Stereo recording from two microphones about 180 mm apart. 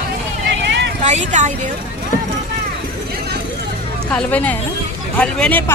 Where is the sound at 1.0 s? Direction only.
40° right (ahead or behind).